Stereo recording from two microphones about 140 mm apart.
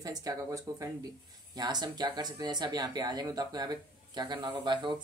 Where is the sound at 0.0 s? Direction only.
25° right (ahead or behind).